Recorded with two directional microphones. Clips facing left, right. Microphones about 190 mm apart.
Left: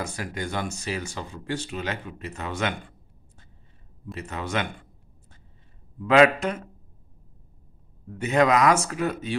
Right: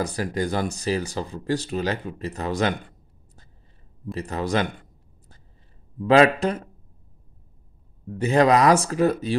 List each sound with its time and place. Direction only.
0.0 s speech: 35° right (ahead or behind)
4.1 s speech: 35° right (ahead or behind)
5.9 s speech: 35° right (ahead or behind)
8.2 s speech: 35° right (ahead or behind)